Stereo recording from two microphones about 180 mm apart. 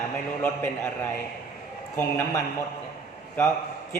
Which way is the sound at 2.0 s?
15° left (ahead or behind).